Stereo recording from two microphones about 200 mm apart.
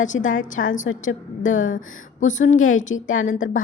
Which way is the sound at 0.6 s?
65° left (ahead or behind).